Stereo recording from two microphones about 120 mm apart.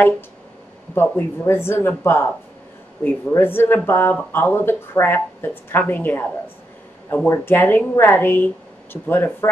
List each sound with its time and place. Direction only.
0.9 s a woman's voice: 15° left (ahead or behind)
7.2 s a woman's voice: 20° left (ahead or behind)